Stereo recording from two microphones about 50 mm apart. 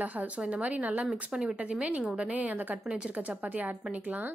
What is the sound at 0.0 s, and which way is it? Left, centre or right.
A woman's voice, right.